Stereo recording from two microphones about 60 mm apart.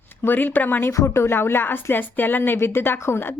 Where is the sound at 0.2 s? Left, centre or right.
Left.